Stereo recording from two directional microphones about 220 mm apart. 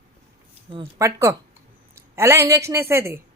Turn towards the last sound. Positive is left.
turn(degrees=-10)  # may be behind; listen again after turning